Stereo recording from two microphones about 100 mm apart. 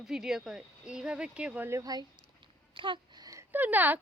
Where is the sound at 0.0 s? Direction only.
5° right (ahead or behind).